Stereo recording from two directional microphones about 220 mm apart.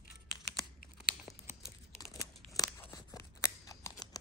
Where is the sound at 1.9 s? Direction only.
15° left (ahead or behind).